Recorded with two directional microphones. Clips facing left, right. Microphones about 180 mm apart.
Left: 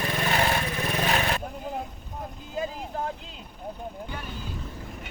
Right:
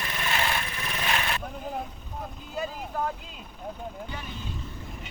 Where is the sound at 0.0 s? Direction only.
40° left (ahead or behind).